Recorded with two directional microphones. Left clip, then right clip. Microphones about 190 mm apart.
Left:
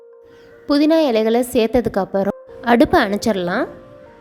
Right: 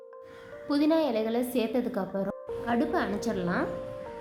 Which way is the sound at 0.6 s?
45° left (ahead or behind).